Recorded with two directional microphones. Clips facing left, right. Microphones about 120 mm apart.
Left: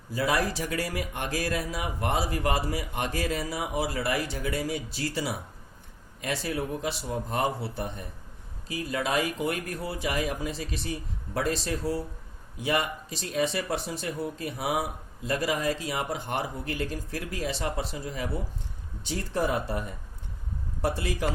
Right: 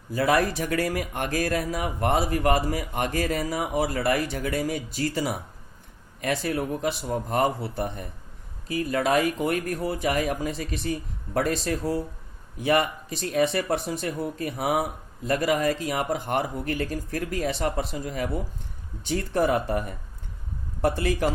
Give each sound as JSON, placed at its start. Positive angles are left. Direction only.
{"t": 0.1, "sound": "speech", "side_deg": -55}
{"t": 20.8, "sound": "a man's voice", "side_deg": -55}